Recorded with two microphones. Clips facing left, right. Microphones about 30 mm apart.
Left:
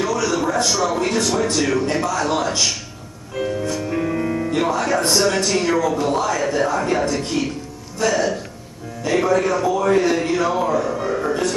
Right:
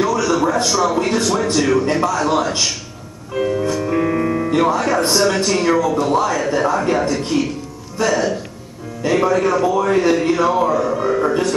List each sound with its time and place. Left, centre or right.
0.0 s a man's voice: centre
3.3 s music: centre
4.6 s a man's voice: centre